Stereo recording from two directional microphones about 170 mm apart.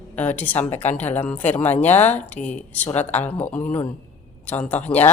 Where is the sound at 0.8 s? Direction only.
40° left (ahead or behind).